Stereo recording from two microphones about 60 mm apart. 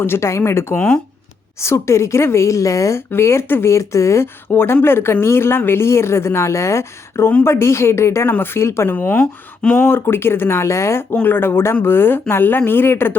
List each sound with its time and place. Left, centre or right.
0.0 s a woman's voice: left
3.1 s a woman's voice: left
4.5 s a woman's voice: left
8.3 s speech: left
11.1 s speech: left